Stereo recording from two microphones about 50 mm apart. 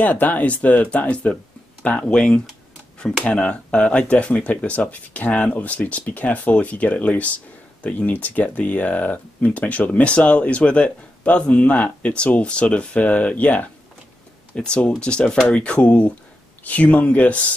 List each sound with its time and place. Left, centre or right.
0.0 s speech: left